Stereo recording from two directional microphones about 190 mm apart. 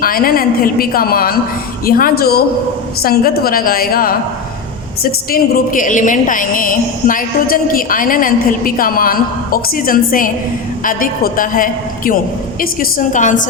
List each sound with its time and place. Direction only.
0.0 s music: 50° left (ahead or behind)